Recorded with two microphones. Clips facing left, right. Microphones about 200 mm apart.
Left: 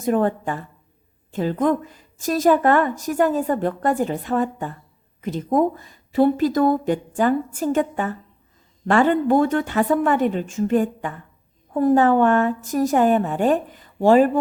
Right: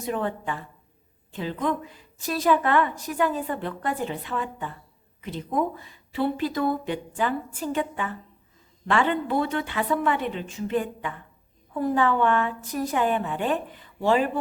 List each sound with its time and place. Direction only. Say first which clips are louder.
0.0 s a woman's voice: left 8 dB; 45° left (ahead or behind)